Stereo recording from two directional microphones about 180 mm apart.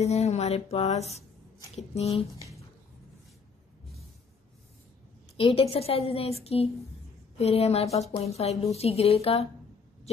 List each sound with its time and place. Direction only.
0.0 s a woman's voice: 35° left (ahead or behind)
5.4 s a woman's voice: 30° left (ahead or behind)